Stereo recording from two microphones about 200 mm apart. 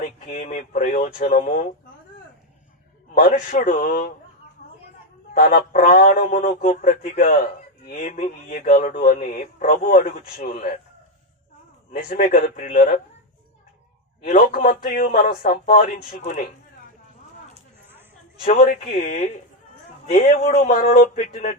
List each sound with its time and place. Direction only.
0.3 s speech: 40° left (ahead or behind)
3.2 s speech: 40° left (ahead or behind)
5.3 s speech: 45° left (ahead or behind)
11.9 s speech: 45° left (ahead or behind)
14.3 s speech: 40° left (ahead or behind)
18.4 s speech: 45° left (ahead or behind)
20.9 s speech: 45° left (ahead or behind)